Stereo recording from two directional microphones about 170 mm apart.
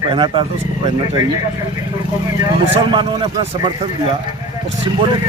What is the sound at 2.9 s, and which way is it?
Speech, 30° right (ahead or behind).